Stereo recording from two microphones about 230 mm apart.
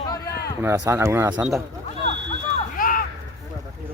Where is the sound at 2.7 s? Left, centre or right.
Left.